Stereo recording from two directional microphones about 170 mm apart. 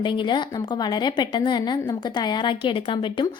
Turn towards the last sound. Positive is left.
turn(degrees=30)  # may be behind; listen again after turning